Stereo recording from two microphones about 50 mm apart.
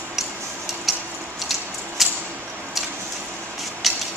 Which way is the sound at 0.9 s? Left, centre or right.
Centre.